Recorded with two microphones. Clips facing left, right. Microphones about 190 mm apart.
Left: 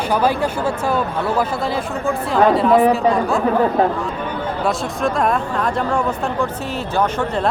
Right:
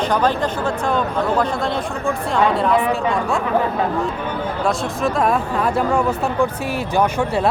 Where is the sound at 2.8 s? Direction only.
35° left (ahead or behind).